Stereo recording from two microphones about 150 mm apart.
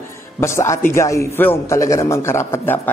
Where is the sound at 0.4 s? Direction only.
20° left (ahead or behind).